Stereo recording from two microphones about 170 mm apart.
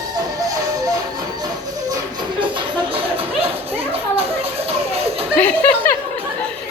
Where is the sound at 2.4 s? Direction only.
30° right (ahead or behind).